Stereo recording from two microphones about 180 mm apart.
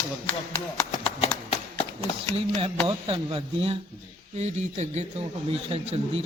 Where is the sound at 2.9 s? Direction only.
30° right (ahead or behind).